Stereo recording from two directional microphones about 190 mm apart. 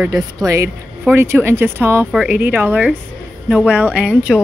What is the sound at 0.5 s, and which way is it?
Speech, 15° right (ahead or behind).